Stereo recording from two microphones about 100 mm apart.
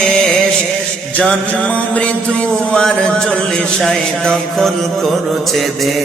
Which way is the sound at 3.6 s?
5° left (ahead or behind).